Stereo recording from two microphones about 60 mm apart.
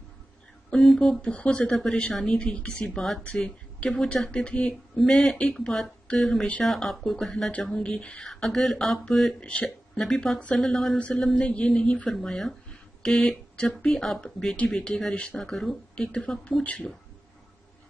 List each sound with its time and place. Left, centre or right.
0.7 s speech: centre
1.2 s speech: centre
2.8 s speech: centre
3.3 s speech: centre
4.9 s speech: centre
8.2 s speech: centre
9.4 s speech: left
9.9 s speech: centre
11.0 s speech: centre
12.2 s speech: centre
13.9 s speech: centre
15.9 s speech: centre
16.6 s speech: left